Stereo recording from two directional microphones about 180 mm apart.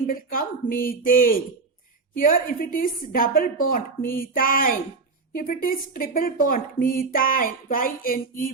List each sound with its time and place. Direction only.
0.1 s speech: 50° left (ahead or behind)